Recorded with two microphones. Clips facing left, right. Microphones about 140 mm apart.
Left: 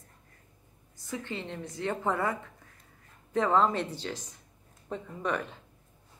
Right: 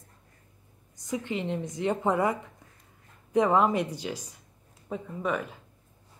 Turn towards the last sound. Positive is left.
turn(degrees=-5)  # may be behind; listen again after turning